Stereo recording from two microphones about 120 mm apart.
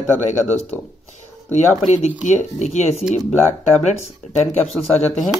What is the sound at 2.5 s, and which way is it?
Speech, 70° left (ahead or behind).